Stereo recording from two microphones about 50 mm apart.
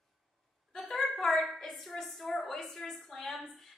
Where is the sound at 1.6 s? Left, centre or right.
Centre.